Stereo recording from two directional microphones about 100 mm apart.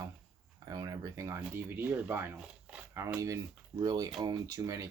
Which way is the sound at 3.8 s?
40° right (ahead or behind).